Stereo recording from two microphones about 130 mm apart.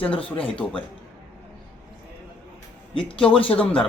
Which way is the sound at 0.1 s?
45° left (ahead or behind).